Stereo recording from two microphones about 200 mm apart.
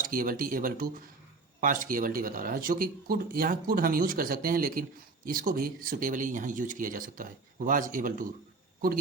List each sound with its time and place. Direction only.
0.0 s speech: 45° right (ahead or behind)